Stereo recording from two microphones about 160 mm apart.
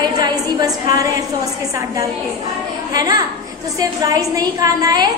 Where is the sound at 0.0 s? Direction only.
25° right (ahead or behind).